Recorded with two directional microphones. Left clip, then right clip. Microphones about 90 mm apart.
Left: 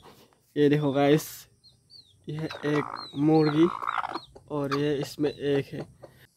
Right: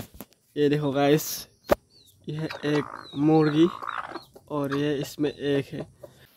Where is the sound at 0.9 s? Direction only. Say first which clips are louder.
Right 1 dB; 5° right (ahead or behind).